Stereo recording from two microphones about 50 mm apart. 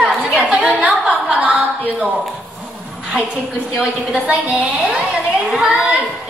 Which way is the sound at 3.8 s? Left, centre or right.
Right.